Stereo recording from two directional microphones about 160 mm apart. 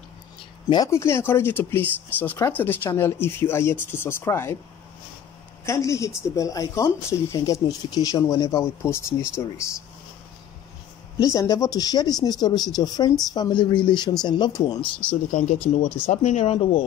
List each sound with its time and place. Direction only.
0.7 s speech: 20° left (ahead or behind)
5.7 s speech: 20° left (ahead or behind)
11.1 s speech: 20° left (ahead or behind)
15.7 s speech: 45° left (ahead or behind)